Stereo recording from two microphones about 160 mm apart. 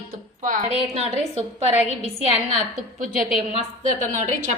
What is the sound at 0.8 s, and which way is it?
Speech, 40° right (ahead or behind).